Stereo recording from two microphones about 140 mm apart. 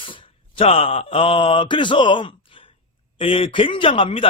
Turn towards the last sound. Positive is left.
turn(degrees=40)  # may be behind; listen again after turning